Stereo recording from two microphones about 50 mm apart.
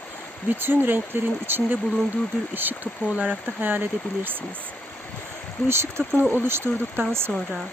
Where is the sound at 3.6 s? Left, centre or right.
Right.